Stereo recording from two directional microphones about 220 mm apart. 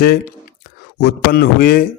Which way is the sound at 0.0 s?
40° left (ahead or behind).